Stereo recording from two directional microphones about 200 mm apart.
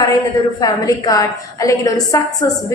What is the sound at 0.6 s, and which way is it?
A woman's voice, 20° left (ahead or behind).